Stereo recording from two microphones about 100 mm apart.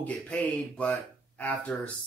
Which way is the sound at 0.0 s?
15° left (ahead or behind).